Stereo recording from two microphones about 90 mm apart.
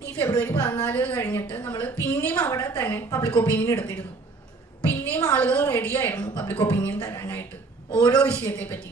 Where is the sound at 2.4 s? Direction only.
35° left (ahead or behind).